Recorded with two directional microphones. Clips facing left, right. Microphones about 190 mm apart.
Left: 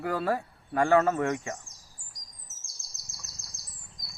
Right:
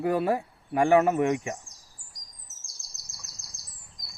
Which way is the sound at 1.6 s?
Centre (ahead or behind).